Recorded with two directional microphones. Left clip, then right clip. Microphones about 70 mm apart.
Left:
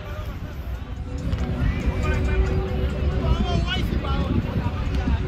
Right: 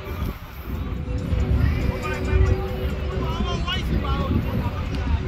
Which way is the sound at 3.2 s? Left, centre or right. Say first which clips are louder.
Left 1 dB; centre.